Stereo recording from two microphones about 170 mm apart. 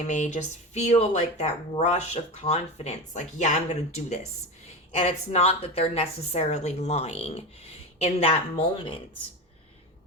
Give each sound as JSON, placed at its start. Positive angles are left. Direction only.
{"t": 0.1, "sound": "a woman's voice", "side_deg": 45}